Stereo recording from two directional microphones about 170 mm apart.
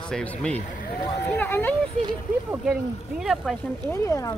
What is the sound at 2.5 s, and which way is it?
Speech, 5° right (ahead or behind).